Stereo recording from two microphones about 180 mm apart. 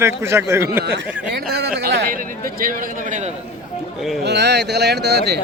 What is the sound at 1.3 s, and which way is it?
A man's voice, 65° right (ahead or behind).